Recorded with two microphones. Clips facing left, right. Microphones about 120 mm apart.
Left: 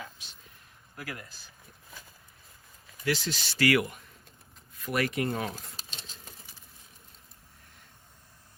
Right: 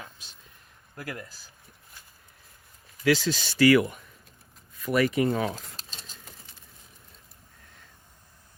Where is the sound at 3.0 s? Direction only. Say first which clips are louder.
Right 7 dB; 90° right.